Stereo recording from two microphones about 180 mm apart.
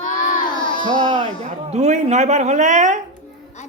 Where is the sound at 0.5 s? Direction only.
25° left (ahead or behind).